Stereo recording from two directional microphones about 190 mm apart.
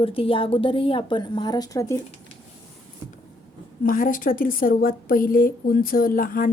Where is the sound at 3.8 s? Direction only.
45° left (ahead or behind).